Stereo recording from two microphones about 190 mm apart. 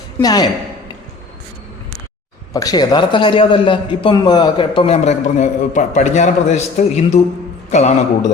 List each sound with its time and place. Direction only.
0.2 s a man's voice: 20° left (ahead or behind)
2.5 s a man's voice: 20° left (ahead or behind); by 7.9 s 35° left (ahead or behind)